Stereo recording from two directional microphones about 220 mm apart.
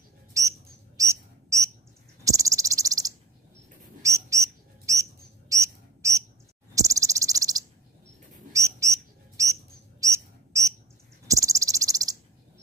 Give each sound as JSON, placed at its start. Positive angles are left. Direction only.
{"t": 0.3, "sound": "bird", "side_deg": -15}
{"t": 2.2, "sound": "cricket", "side_deg": -15}
{"t": 4.0, "sound": "bird", "side_deg": -15}
{"t": 5.5, "sound": "a sound", "side_deg": -15}
{"t": 6.7, "sound": "cricket", "side_deg": -15}
{"t": 8.5, "sound": "bird", "side_deg": -15}
{"t": 11.2, "sound": "cricket", "side_deg": -15}